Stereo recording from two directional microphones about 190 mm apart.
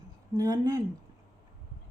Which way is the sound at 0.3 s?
20° right (ahead or behind).